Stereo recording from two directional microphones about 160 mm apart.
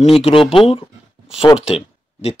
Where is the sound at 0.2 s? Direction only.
35° left (ahead or behind).